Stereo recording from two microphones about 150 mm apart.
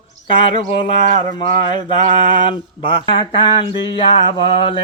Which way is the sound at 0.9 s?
55° right (ahead or behind).